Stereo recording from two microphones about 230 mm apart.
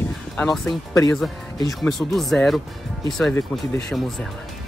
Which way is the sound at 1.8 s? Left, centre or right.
Centre.